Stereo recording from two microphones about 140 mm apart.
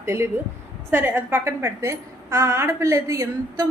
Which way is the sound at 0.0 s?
20° right (ahead or behind).